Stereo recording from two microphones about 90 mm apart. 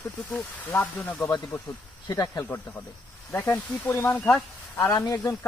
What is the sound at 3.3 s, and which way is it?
Speech, 25° left (ahead or behind).